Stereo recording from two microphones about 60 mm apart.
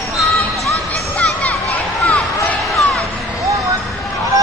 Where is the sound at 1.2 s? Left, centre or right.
Left.